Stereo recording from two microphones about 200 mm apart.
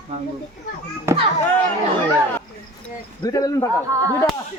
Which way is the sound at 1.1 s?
15° right (ahead or behind).